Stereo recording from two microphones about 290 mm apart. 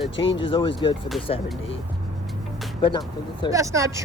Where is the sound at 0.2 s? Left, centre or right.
Left.